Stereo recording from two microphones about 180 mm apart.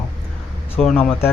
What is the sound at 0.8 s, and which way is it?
Speech, 5° left (ahead or behind).